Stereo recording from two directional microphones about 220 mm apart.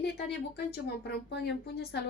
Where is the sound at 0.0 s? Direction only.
50° left (ahead or behind).